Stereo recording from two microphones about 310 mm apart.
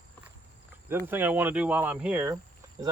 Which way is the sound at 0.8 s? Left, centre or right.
Centre.